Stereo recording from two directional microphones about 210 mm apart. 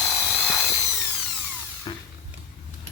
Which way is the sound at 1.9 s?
20° left (ahead or behind).